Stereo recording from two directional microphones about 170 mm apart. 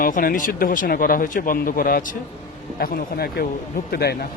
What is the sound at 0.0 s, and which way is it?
Speech, 55° left (ahead or behind).